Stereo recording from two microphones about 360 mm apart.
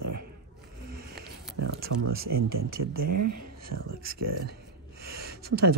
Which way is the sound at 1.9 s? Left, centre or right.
Right.